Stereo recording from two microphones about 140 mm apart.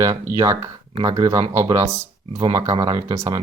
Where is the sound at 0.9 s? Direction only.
40° right (ahead or behind).